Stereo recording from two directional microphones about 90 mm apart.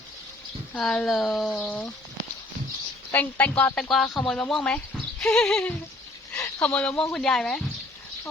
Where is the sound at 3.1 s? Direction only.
20° left (ahead or behind).